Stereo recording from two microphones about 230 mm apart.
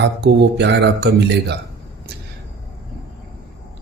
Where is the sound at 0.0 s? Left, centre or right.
Right.